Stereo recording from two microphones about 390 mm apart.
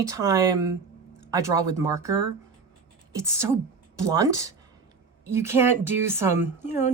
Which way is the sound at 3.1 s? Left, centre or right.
Centre.